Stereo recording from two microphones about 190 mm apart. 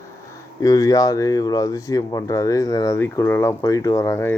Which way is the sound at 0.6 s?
20° left (ahead or behind).